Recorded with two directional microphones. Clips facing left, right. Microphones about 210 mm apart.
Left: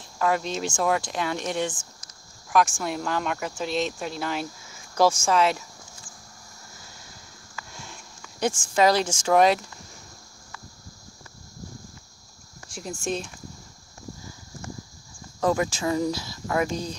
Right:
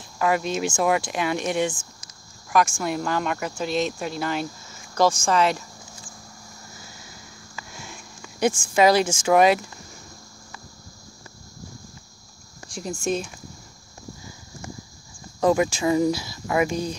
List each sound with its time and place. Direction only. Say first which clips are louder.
0.2 s speech: right 2 dB; 10° right (ahead or behind)
2.5 s speech: right 1 dB; centre (ahead or behind)
7.7 s sniff: right 4 dB; 5° right (ahead or behind)
8.2 s speech: right 4 dB; 10° right (ahead or behind)
13.0 s speech: right 4 dB; centre (ahead or behind)
15.4 s speech: right 4 dB; 15° right (ahead or behind)